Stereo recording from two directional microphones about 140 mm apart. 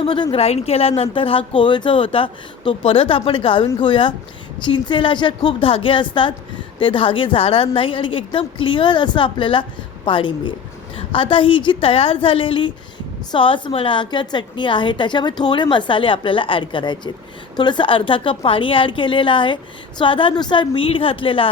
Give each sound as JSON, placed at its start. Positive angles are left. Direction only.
{"t": 0.0, "sound": "speech", "side_deg": 40}